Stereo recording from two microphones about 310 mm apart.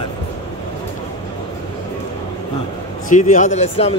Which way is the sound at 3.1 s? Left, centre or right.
Left.